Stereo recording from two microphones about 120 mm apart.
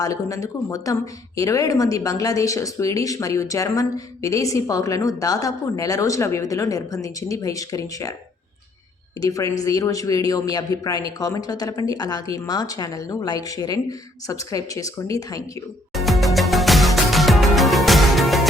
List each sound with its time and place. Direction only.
0.0 s speech: 30° left (ahead or behind)
9.2 s speech: 30° left (ahead or behind)
15.9 s music: centre (ahead or behind)